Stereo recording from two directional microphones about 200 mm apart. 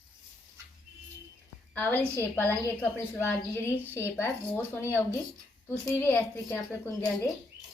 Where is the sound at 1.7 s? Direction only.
10° left (ahead or behind).